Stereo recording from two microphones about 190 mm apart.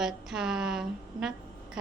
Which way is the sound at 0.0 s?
5° right (ahead or behind).